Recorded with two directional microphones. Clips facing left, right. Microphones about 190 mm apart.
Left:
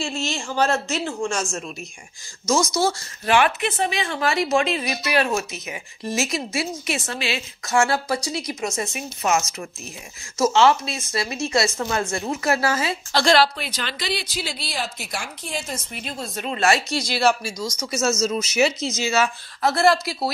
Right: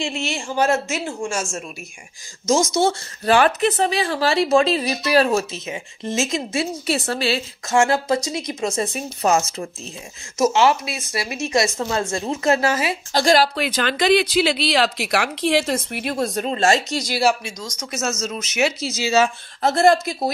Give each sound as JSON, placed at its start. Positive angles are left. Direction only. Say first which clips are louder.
{"t": 0.0, "sound": "speech", "louder": "right 1 dB", "side_deg": -15}
{"t": 2.5, "sound": "speech", "louder": "right 3 dB", "side_deg": -25}
{"t": 3.3, "sound": "speech", "louder": "right 3 dB", "side_deg": -35}
{"t": 10.4, "sound": "speech", "louder": "even", "side_deg": -15}
{"t": 13.1, "sound": "speech", "louder": "right 1 dB", "side_deg": -40}
{"t": 13.7, "sound": "speech", "louder": "right 11 dB", "side_deg": -55}
{"t": 16.3, "sound": "speech", "louder": "even", "side_deg": -40}
{"t": 17.2, "sound": "speech", "louder": "even", "side_deg": -5}
{"t": 19.1, "sound": "speech", "louder": "right 8 dB", "side_deg": -25}